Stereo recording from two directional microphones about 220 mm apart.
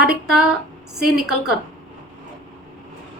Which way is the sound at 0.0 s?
Centre (ahead or behind).